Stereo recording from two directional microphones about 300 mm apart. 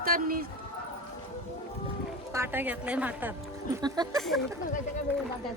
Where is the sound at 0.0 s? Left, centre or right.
Right.